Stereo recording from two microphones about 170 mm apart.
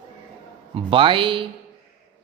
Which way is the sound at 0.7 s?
30° right (ahead or behind).